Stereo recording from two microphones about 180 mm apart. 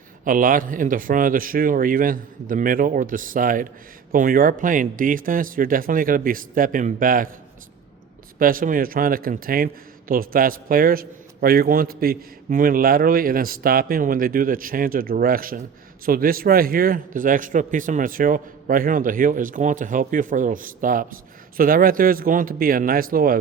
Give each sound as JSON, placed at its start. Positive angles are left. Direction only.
{"t": 0.3, "sound": "a man's voice", "side_deg": -50}
{"t": 8.4, "sound": "a man's voice", "side_deg": -50}